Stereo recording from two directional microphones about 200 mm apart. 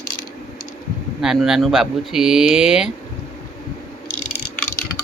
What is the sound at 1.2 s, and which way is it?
Speech, centre (ahead or behind).